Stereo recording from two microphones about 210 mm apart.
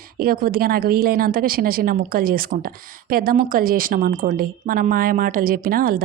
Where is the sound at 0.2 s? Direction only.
45° right (ahead or behind).